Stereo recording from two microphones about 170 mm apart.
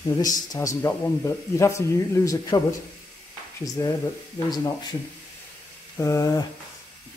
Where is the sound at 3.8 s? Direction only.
20° left (ahead or behind).